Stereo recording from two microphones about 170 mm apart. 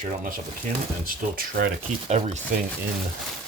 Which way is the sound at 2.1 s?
40° right (ahead or behind).